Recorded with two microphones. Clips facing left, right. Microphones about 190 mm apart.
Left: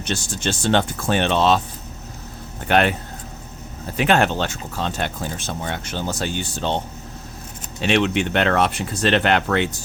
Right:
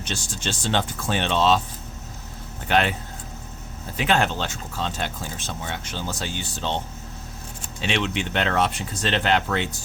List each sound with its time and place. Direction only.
0.0 s speech: 60° left (ahead or behind)
2.6 s speech: 55° left (ahead or behind)
3.9 s speech: 60° left (ahead or behind)
7.8 s speech: 55° left (ahead or behind)